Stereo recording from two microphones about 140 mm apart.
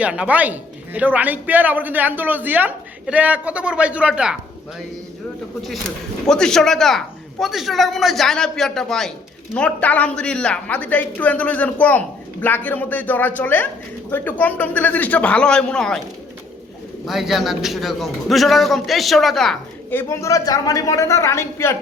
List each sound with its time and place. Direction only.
0.0 s a man's voice: 10° right (ahead or behind)
6.2 s a man's voice: 5° left (ahead or behind)
17.1 s a man's voice: centre (ahead or behind)
19.9 s a woman's voice: 15° left (ahead or behind)